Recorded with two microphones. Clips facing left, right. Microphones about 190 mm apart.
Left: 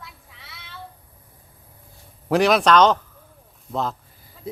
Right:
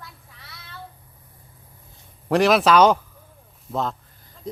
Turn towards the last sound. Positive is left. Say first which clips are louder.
# even
turn(degrees=5)  # may be behind; listen again after turning